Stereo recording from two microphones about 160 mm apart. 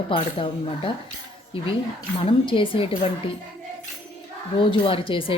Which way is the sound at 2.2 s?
35° left (ahead or behind).